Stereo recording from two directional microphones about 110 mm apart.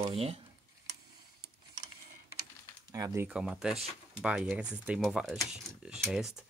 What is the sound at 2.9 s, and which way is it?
Speech, 30° right (ahead or behind).